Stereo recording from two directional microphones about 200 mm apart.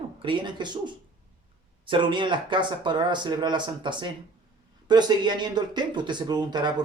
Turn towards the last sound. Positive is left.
turn(degrees=-20)  # may be behind; listen again after turning